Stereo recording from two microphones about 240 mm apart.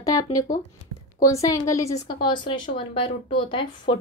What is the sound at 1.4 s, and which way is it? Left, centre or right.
A woman's voice, centre.